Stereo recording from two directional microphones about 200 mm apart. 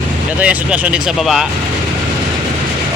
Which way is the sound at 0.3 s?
5° right (ahead or behind).